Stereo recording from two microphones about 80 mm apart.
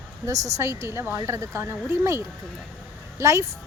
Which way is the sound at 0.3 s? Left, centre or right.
Right.